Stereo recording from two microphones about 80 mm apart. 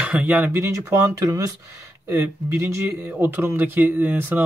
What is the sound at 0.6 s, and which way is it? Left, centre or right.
Speech, right.